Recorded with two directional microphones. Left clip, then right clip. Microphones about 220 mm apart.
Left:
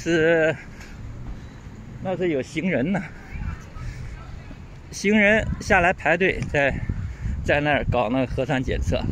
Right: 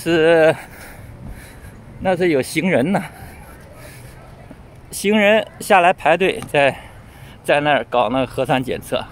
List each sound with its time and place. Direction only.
0.0 s speech: 15° right (ahead or behind)
2.0 s speech: 25° right (ahead or behind)
5.0 s speech: 10° right (ahead or behind)